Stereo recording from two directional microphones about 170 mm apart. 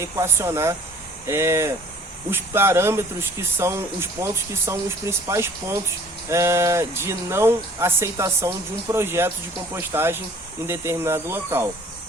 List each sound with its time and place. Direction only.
0.0 s speech: 15° right (ahead or behind)